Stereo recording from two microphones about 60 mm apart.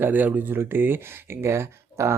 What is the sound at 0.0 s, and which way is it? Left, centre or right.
Speech, right.